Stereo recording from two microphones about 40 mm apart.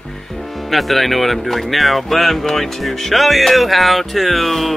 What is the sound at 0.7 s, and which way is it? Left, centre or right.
Speech, centre.